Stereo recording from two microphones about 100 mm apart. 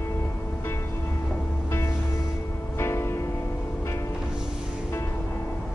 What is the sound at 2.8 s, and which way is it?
Music, 25° left (ahead or behind).